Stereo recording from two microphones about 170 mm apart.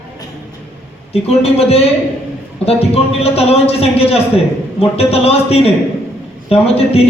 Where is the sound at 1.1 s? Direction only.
35° left (ahead or behind).